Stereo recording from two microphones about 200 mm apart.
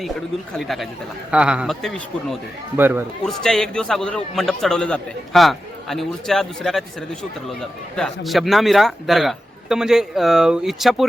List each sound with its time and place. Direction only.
0.5 s a man's voice: centre (ahead or behind)
2.7 s speech: 10° right (ahead or behind)
3.2 s a man's voice: centre (ahead or behind)